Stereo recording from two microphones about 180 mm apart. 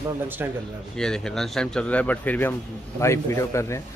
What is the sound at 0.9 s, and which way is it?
Speech, 5° left (ahead or behind).